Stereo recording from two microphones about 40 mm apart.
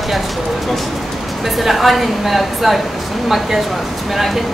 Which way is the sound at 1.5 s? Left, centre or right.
Centre.